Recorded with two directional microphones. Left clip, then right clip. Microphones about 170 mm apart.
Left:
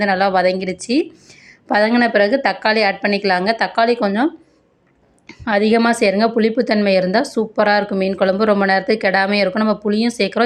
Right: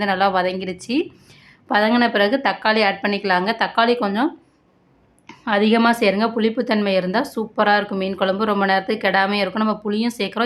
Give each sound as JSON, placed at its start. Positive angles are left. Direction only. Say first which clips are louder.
{"t": 0.0, "sound": "a woman's voice", "louder": "left 3 dB", "side_deg": 20}
{"t": 5.3, "sound": "a woman's voice", "louder": "left 3 dB", "side_deg": 20}